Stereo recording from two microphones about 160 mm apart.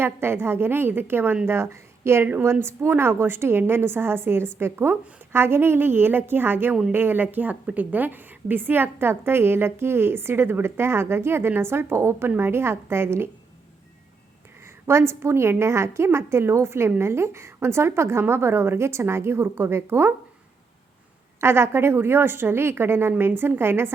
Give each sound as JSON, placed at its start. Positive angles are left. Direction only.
{"t": 0.0, "sound": "a woman's voice", "side_deg": -15}
{"t": 14.8, "sound": "a woman's voice", "side_deg": -15}
{"t": 21.4, "sound": "a woman's voice", "side_deg": -15}